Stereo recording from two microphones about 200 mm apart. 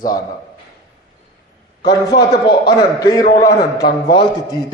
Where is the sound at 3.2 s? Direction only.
50° left (ahead or behind).